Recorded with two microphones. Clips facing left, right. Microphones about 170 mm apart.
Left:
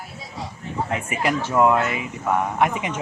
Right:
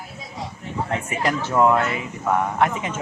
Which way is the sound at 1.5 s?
5° left (ahead or behind).